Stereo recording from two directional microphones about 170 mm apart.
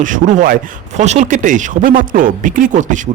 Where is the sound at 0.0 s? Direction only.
50° right (ahead or behind).